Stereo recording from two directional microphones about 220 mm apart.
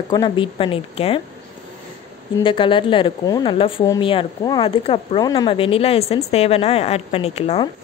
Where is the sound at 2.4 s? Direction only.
25° left (ahead or behind).